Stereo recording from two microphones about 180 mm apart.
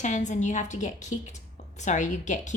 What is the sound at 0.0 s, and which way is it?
A woman's voice, 40° left (ahead or behind).